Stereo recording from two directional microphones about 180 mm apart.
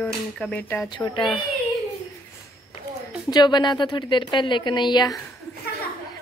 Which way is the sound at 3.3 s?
25° left (ahead or behind).